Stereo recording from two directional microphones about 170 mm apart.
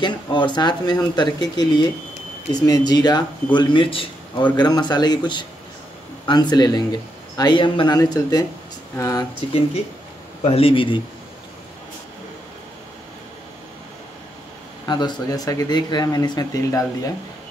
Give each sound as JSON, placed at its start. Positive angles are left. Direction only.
{"t": 0.0, "sound": "speech", "side_deg": 25}
{"t": 9.5, "sound": "speech", "side_deg": 35}
{"t": 14.9, "sound": "speech", "side_deg": 25}